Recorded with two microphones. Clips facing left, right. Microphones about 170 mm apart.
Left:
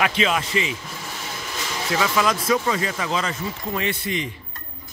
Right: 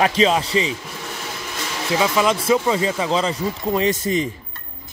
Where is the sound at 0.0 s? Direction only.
35° right (ahead or behind).